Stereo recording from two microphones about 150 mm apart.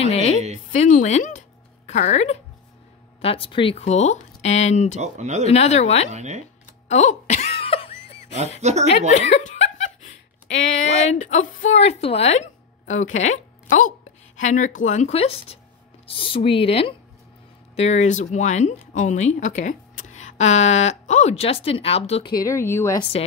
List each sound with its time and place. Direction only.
0.0 s a sound: 45° left (ahead or behind)
0.7 s speech: 60° left (ahead or behind)
5.0 s speech: 50° right (ahead or behind)
5.5 s speech: 45° left (ahead or behind)
6.0 s speech: 50° right (ahead or behind)
6.9 s speech: 50° left (ahead or behind)
7.6 s a sound: 40° left (ahead or behind)
8.5 s speech: 50° right (ahead or behind)
9.1 s speech: 50° left (ahead or behind)
11.1 s a woman's voice: 55° left (ahead or behind); by 16.9 s 40° left (ahead or behind)
17.7 s speech: 50° left (ahead or behind)
22.3 s speech: 20° left (ahead or behind)
23.2 s speech: 40° left (ahead or behind)